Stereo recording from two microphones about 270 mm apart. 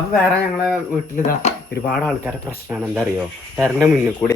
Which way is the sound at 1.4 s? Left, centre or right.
Left.